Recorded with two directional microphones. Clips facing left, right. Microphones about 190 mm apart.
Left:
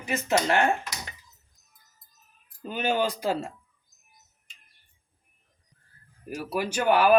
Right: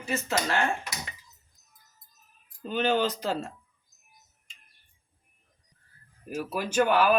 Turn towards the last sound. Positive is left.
turn(degrees=10)  # may be behind; listen again after turning